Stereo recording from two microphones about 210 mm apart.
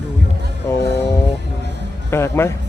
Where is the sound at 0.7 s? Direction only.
10° left (ahead or behind).